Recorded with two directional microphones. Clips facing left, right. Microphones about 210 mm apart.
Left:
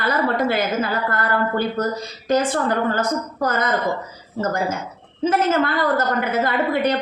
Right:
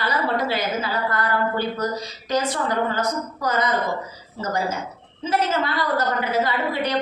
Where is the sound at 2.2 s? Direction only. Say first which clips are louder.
Left 4 dB; 50° left (ahead or behind).